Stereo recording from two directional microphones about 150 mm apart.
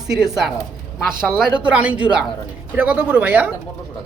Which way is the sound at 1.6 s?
10° right (ahead or behind).